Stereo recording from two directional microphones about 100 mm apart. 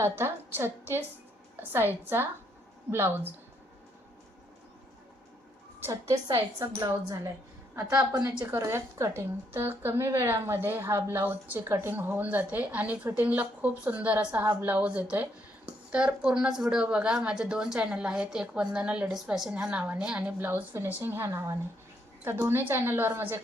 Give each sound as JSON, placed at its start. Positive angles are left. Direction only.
{"t": 0.0, "sound": "a woman's voice", "side_deg": -25}
{"t": 5.8, "sound": "a woman's voice", "side_deg": -30}
{"t": 8.4, "sound": "a woman's voice", "side_deg": -25}